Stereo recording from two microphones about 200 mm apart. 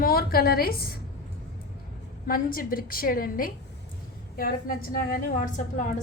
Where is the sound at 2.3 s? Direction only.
45° left (ahead or behind).